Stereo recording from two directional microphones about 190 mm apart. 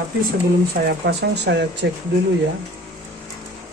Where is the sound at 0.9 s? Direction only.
60° right (ahead or behind).